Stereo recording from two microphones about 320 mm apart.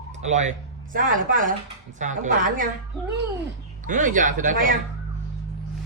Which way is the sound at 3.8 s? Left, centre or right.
Right.